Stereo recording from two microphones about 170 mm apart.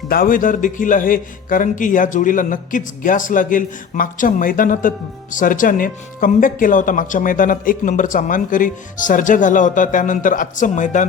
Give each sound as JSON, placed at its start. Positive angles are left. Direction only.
{"t": 0.1, "sound": "a man's voice", "side_deg": 55}